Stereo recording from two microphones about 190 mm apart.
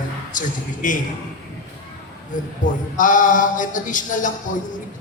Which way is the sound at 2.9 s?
45° left (ahead or behind).